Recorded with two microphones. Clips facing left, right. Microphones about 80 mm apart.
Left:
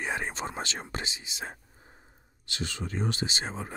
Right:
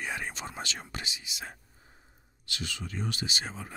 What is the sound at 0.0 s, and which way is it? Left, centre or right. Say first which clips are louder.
Speech: left 4 dB; left.